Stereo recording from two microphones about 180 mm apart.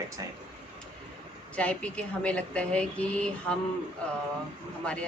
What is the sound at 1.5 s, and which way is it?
A woman's voice, 5° left (ahead or behind).